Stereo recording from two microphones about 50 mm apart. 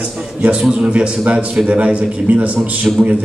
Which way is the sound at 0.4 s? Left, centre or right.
Right.